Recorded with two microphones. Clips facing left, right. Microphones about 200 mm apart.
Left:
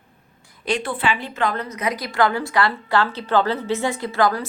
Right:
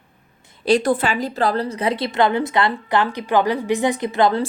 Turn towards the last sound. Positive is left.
turn(degrees=-25)  # may be behind; listen again after turning